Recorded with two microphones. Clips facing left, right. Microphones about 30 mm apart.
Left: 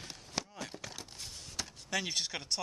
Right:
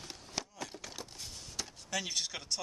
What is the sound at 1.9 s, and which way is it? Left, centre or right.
Speech, centre.